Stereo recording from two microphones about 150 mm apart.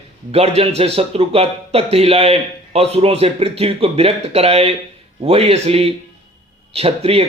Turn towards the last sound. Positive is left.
turn(degrees=-40)  # may be behind; listen again after turning